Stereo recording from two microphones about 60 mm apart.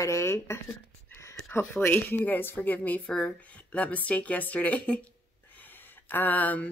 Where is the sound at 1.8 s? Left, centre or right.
Left.